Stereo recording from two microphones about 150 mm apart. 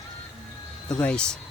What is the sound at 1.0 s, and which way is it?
Speech, 5° left (ahead or behind).